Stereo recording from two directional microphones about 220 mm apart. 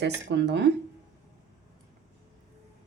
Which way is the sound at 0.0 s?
50° right (ahead or behind).